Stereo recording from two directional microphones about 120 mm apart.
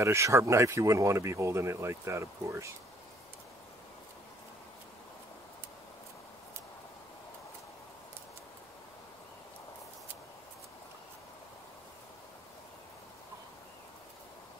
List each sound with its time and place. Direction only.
0.0 s speech: 25° right (ahead or behind)